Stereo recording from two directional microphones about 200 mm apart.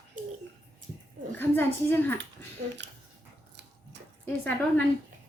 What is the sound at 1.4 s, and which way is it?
Speech, 10° left (ahead or behind).